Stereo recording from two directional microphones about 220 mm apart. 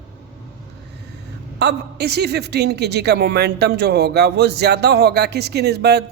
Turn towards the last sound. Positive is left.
turn(degrees=-45)  # may be behind; listen again after turning